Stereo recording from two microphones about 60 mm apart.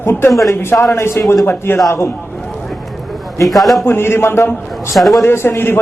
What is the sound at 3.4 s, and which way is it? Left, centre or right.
Speech, centre.